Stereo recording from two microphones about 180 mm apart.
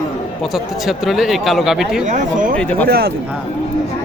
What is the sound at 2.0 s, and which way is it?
Speech, 45° right (ahead or behind).